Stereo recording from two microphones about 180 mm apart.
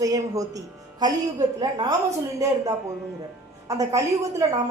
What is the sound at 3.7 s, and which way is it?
Speech, 20° right (ahead or behind).